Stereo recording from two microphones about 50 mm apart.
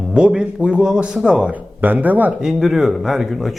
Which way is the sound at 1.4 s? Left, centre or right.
Right.